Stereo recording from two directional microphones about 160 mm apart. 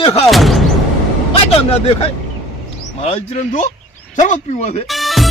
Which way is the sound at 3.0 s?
40° left (ahead or behind).